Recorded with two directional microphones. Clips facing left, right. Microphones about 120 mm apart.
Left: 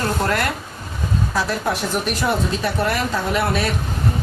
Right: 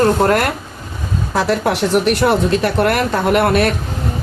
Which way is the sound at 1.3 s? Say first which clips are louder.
Right 8 dB; 65° right (ahead or behind).